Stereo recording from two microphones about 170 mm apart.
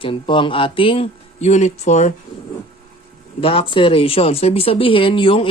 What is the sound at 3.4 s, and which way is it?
Speech, 35° left (ahead or behind).